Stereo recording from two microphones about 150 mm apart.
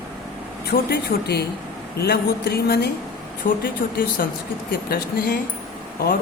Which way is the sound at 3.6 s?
75° left (ahead or behind).